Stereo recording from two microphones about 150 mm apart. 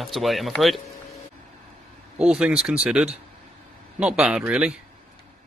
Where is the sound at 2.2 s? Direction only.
5° right (ahead or behind).